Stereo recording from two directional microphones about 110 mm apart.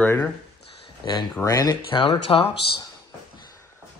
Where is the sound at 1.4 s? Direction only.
30° left (ahead or behind).